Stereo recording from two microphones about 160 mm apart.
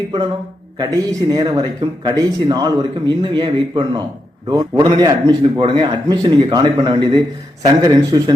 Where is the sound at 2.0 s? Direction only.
25° right (ahead or behind).